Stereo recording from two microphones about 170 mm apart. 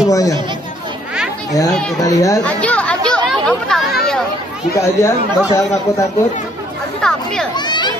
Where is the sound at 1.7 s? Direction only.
5° left (ahead or behind).